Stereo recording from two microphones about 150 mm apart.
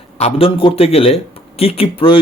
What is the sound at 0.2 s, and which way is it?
A man's voice, 40° left (ahead or behind).